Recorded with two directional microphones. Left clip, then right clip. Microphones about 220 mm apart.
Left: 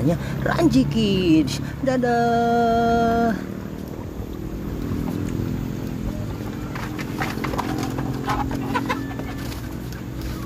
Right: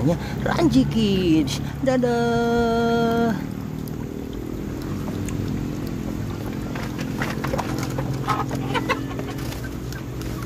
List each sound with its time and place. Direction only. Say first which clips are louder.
0.1 s speech: even; 5° left (ahead or behind)